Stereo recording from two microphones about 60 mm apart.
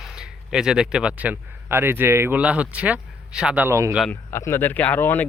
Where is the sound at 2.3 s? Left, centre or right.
Right.